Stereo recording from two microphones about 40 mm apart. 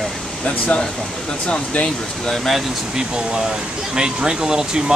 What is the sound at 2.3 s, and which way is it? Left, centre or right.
Speech, centre.